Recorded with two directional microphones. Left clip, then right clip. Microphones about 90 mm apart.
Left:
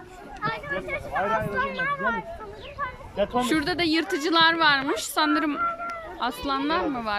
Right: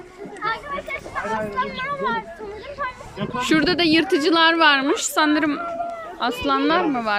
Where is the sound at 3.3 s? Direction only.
5° right (ahead or behind).